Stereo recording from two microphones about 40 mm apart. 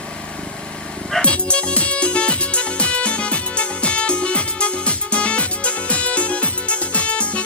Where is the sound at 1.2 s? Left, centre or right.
Left.